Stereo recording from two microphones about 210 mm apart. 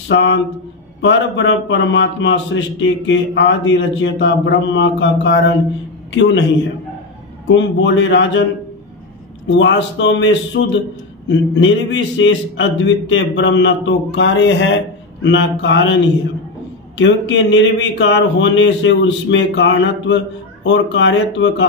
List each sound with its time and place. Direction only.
0.1 s a man's voice: 60° left (ahead or behind)
7.4 s a man's voice: 60° left (ahead or behind)
9.5 s a man's voice: 60° left (ahead or behind)